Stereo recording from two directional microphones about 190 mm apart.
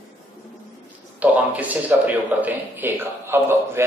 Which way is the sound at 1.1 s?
10° right (ahead or behind).